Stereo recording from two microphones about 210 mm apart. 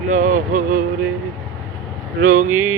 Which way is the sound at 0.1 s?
35° right (ahead or behind).